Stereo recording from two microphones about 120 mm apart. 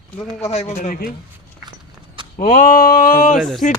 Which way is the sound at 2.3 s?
90° left.